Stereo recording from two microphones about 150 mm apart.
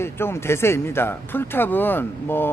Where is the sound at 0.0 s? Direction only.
15° left (ahead or behind).